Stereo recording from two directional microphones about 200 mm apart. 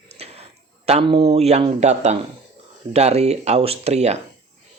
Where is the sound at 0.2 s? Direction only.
30° right (ahead or behind).